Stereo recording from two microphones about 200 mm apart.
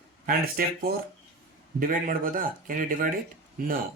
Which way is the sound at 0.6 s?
45° right (ahead or behind).